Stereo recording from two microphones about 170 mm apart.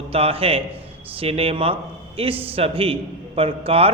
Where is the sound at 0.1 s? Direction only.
35° right (ahead or behind).